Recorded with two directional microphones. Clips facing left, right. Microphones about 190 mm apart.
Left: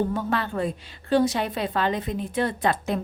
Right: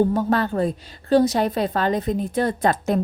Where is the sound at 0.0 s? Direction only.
40° right (ahead or behind).